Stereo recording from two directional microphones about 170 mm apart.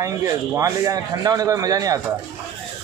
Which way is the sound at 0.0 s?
20° right (ahead or behind).